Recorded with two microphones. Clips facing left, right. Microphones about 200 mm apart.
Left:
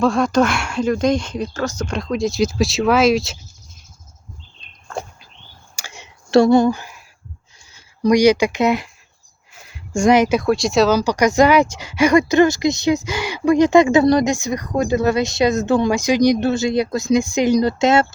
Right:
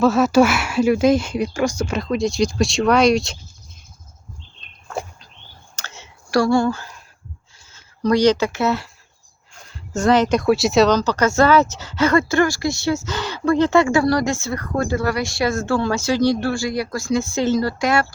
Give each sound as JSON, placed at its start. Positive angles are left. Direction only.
{"t": 0.0, "sound": "speech", "side_deg": -5}
{"t": 5.7, "sound": "a sound", "side_deg": 15}
{"t": 7.7, "sound": "speech", "side_deg": 15}